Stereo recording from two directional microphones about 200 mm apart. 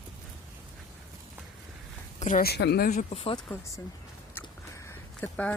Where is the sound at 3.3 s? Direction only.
15° left (ahead or behind).